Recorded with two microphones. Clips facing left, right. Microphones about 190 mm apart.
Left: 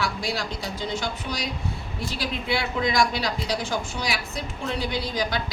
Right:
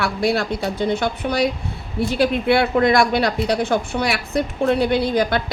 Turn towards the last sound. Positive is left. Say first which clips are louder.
# right 9 dB
turn(degrees=-60)  # may be behind; listen again after turning